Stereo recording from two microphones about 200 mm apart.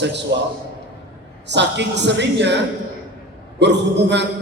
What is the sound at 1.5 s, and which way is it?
A man's voice, 60° right (ahead or behind).